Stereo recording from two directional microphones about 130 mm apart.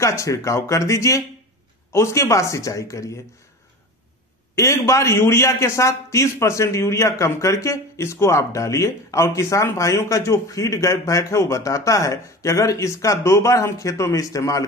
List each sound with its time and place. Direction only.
0.0 s a man's voice: 25° left (ahead or behind)
4.6 s a man's voice: 20° left (ahead or behind)